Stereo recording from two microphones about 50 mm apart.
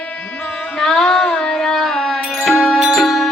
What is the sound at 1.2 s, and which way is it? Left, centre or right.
Carnatic music, centre.